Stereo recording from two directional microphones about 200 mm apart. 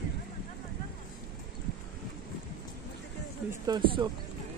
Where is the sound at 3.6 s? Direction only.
20° right (ahead or behind).